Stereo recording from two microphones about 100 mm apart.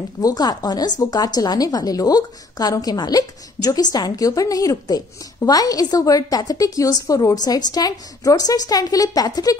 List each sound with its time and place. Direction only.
0.2 s speech: 40° left (ahead or behind)